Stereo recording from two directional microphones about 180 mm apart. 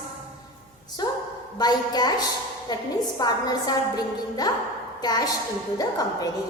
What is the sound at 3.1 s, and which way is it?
A woman's voice, 20° left (ahead or behind).